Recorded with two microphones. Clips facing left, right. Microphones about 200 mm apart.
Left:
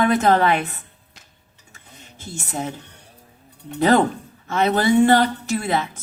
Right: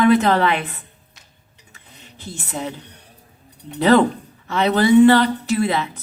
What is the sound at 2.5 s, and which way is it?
Speech, 45° left (ahead or behind).